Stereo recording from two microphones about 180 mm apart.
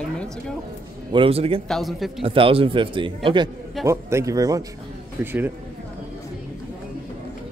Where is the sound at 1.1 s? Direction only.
30° right (ahead or behind).